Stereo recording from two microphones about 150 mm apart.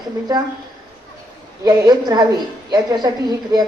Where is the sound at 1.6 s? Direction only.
25° right (ahead or behind).